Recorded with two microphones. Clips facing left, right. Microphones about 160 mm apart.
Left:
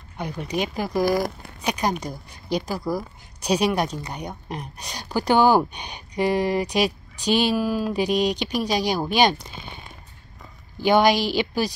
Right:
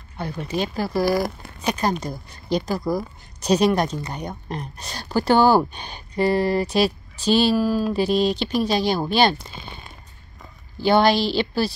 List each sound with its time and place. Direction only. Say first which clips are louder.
0.2 s speech: right 1 dB; 15° left (ahead or behind)
2.8 s speech: right 2 dB; 10° right (ahead or behind)
3.3 s speech: right 3 dB; 10° left (ahead or behind)
10.8 s speech: right 1 dB; 15° left (ahead or behind)